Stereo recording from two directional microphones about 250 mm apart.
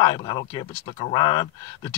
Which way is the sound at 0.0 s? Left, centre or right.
Centre.